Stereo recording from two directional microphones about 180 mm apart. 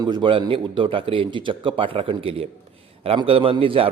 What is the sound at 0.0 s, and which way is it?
A man's voice, 25° right (ahead or behind).